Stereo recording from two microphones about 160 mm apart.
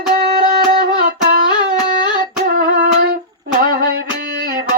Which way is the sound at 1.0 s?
65° right (ahead or behind).